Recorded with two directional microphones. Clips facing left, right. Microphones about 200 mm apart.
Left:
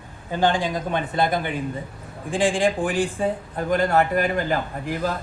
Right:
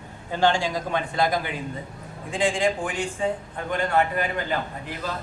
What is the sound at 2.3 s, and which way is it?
A man's voice, 30° left (ahead or behind).